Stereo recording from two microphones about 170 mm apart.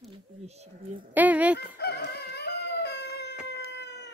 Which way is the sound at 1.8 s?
70° left (ahead or behind).